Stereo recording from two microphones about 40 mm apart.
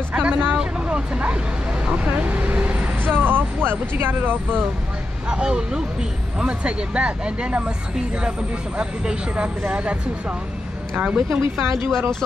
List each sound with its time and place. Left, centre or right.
0.2 s vehicle: right
0.6 s vehicle: right
1.9 s speech: right
3.0 s speech: right
5.3 s speech: centre
11.1 s speech: centre